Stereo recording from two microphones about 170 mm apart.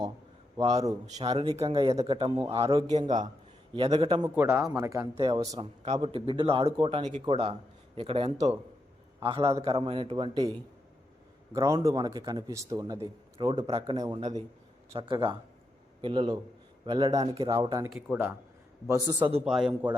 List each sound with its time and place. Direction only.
0.6 s a man's voice: 40° right (ahead or behind)
1.3 s speech: 25° right (ahead or behind)
1.5 s a man's voice: 35° right (ahead or behind)
3.8 s a man's voice: 30° right (ahead or behind)
4.4 s a man's voice: 10° right (ahead or behind)
5.8 s a man's voice: 40° right (ahead or behind)
11.5 s speech: 20° right (ahead or behind)
14.2 s a man's voice: 40° right (ahead or behind)
14.9 s a man's voice: 30° right (ahead or behind)
17.2 s speech: 35° right (ahead or behind)
17.8 s a man's voice: 5° right (ahead or behind)
18.9 s speech: 20° right (ahead or behind)
19.5 s a man's voice: 5° right (ahead or behind)